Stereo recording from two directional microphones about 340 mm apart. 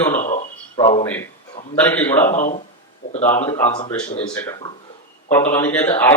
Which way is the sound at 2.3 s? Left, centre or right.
Left.